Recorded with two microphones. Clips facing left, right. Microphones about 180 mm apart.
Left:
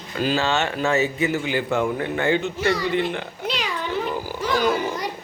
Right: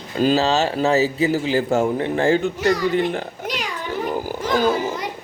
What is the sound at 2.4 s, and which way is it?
Speech, 45° right (ahead or behind).